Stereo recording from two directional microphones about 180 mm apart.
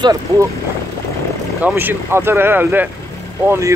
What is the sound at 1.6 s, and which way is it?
Speech, 10° right (ahead or behind).